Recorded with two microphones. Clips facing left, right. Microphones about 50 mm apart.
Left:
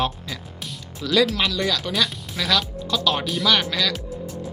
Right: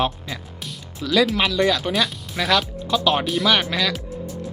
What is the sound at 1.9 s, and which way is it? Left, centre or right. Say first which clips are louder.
Speech: right 2 dB; centre.